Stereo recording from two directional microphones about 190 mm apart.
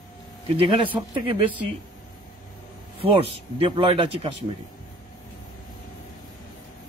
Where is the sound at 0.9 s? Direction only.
25° right (ahead or behind).